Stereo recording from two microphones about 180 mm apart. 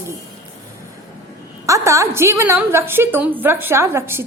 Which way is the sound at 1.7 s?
15° right (ahead or behind).